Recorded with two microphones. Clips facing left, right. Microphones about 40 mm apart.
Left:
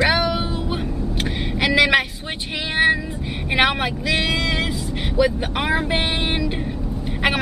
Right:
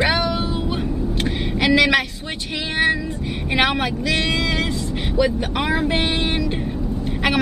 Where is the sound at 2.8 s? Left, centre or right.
Centre.